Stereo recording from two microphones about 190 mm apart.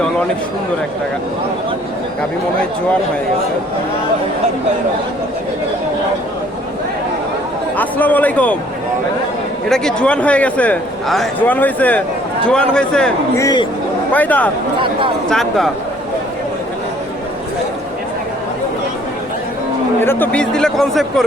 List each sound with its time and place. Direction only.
7.8 s a man's voice: 10° left (ahead or behind)
9.6 s a man's voice: 5° left (ahead or behind)
13.3 s speech: 20° left (ahead or behind)
14.1 s a man's voice: 10° left (ahead or behind)
20.0 s speech: 10° left (ahead or behind)